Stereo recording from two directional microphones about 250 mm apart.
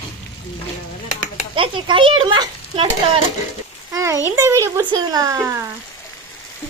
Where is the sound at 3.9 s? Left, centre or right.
Centre.